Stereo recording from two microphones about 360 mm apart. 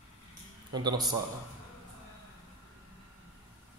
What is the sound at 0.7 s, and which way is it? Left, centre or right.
Speech, centre.